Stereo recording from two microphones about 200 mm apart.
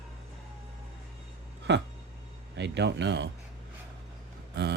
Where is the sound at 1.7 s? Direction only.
60° right (ahead or behind).